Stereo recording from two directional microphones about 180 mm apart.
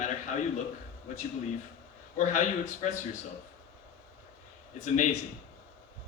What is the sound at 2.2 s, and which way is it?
Speech, 45° left (ahead or behind).